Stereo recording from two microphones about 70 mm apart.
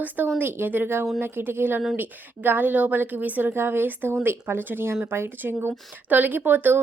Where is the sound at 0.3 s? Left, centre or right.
Right.